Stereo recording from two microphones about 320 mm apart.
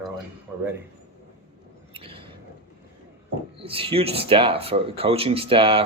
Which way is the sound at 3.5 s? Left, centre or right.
Centre.